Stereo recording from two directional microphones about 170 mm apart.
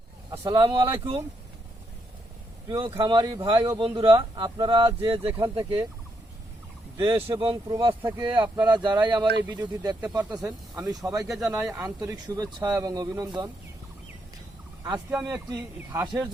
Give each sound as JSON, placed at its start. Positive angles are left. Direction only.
{"t": 0.3, "sound": "speech", "side_deg": -25}
{"t": 2.6, "sound": "speech", "side_deg": -20}
{"t": 5.4, "sound": "speech", "side_deg": -20}
{"t": 6.9, "sound": "speech", "side_deg": -25}
{"t": 15.1, "sound": "a man's voice", "side_deg": -5}
{"t": 15.4, "sound": "speech", "side_deg": -20}